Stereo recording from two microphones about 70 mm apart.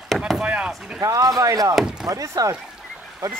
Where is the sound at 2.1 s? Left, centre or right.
Right.